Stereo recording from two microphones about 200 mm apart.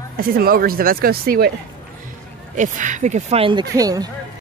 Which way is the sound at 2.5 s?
40° right (ahead or behind).